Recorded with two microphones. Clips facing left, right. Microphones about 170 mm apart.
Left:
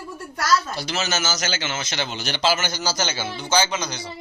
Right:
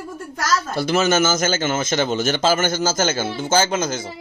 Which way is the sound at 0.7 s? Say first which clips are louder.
Right 8 dB; 55° right (ahead or behind).